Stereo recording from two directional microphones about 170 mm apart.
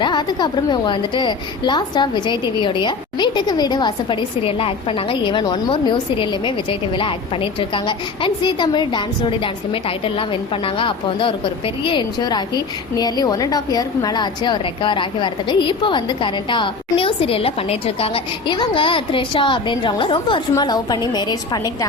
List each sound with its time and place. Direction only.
0.0 s a woman's voice: 25° left (ahead or behind)